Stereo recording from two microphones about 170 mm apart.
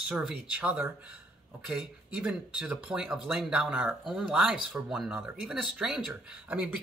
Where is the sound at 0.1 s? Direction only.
5° right (ahead or behind).